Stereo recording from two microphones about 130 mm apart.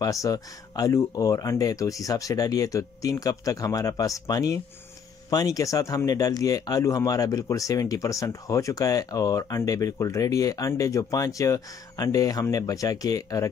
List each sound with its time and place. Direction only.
0.0 s speech: 25° left (ahead or behind)